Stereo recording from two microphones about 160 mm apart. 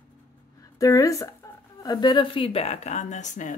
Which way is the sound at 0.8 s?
20° left (ahead or behind).